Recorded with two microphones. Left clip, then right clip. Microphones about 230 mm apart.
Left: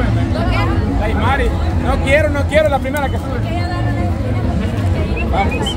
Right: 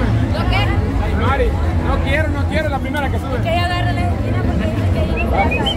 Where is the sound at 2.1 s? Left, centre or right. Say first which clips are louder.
Left 10 dB; left.